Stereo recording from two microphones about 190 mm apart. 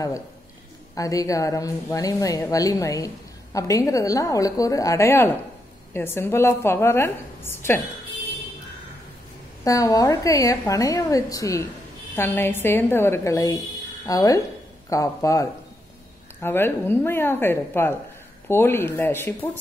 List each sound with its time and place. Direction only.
0.9 s a woman's voice: 15° left (ahead or behind)
9.7 s a woman's voice: 15° left (ahead or behind)